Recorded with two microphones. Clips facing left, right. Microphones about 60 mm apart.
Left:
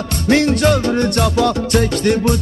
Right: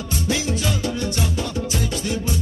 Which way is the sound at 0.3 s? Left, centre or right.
Left.